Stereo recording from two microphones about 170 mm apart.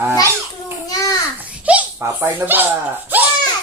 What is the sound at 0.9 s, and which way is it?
Babbling, 20° left (ahead or behind).